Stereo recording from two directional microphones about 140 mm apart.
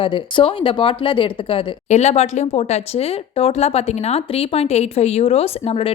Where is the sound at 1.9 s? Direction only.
50° left (ahead or behind).